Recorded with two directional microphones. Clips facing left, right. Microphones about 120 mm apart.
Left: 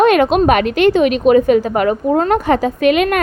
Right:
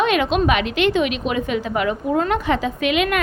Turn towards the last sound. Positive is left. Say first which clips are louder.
# left 7 dB
turn(degrees=45)  # may be behind; listen again after turning